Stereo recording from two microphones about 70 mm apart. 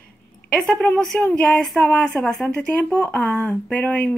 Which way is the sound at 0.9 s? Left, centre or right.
Centre.